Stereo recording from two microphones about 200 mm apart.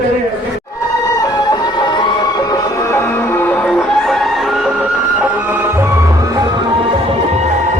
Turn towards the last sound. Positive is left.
turn(degrees=-30)  # may be behind; listen again after turning